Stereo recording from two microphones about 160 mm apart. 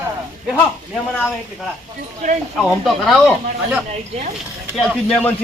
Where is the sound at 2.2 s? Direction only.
45° right (ahead or behind).